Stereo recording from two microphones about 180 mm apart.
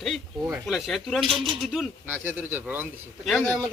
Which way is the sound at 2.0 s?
10° right (ahead or behind).